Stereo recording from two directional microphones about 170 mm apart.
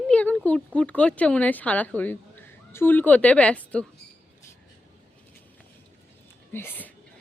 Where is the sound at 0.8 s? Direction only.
5° left (ahead or behind).